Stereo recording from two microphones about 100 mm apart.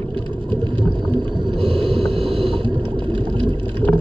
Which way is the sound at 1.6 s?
60° right (ahead or behind).